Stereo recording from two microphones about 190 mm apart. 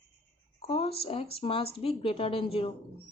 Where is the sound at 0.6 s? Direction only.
30° left (ahead or behind).